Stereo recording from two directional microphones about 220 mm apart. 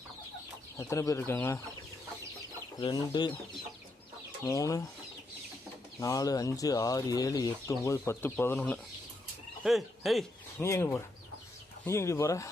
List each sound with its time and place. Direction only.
0.8 s speech: 15° left (ahead or behind)
2.7 s speech: 20° left (ahead or behind)
4.4 s speech: 15° left (ahead or behind)
6.0 s speech: 15° left (ahead or behind); by 10.2 s centre (ahead or behind)
10.6 s speech: 10° left (ahead or behind)